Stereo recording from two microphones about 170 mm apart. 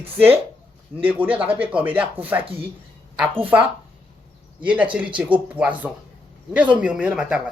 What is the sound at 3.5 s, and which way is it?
Speech, 10° right (ahead or behind).